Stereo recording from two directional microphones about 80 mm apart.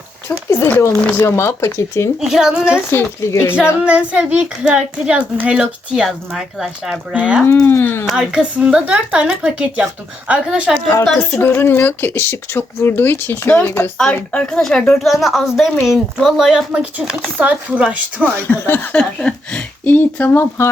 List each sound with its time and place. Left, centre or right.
0.3 s speech: left
2.2 s a child's voice: centre
2.7 s speech: left
3.8 s a child's voice: centre
5.5 s a child's voice: centre
7.6 s speech: left
8.0 s a sound: centre
8.3 s a child's voice: centre
11.0 s speech: centre
11.3 s speech: left
14.0 s a child's voice: centre
18.3 s speech: left
18.9 s speech: centre; by 20.7 s left